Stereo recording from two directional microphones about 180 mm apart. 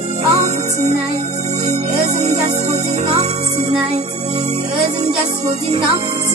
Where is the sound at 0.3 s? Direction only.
40° right (ahead or behind).